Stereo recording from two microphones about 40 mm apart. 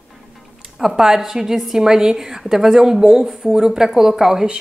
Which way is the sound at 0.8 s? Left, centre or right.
Centre.